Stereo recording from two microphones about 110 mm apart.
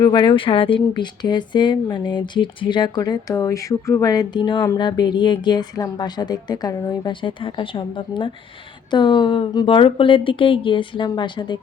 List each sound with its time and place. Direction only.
0.0 s a woman's voice: 45° left (ahead or behind)